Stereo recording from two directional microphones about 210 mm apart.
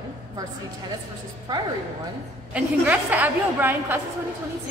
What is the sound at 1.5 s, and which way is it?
Speech, 20° right (ahead or behind).